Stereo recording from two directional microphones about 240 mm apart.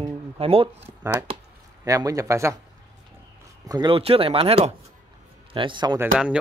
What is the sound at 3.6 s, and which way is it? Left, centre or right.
A man's voice, centre.